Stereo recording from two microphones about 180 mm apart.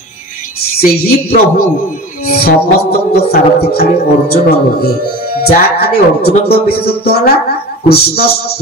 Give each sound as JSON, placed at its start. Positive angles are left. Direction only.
{"t": 0.7, "sound": "speech", "side_deg": 60}